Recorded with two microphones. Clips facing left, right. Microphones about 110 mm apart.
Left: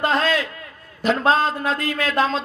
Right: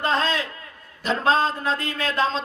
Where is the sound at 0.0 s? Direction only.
30° right (ahead or behind).